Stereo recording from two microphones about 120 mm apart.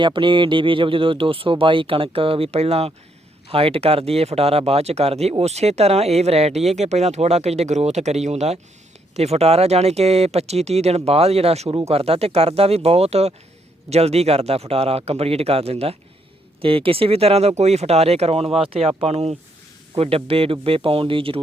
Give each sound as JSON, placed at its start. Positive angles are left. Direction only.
{"t": 0.0, "sound": "speech", "side_deg": -45}